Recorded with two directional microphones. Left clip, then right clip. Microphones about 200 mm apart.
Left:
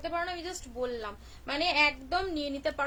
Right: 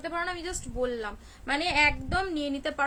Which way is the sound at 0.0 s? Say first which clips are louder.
Right 2 dB; 20° right (ahead or behind).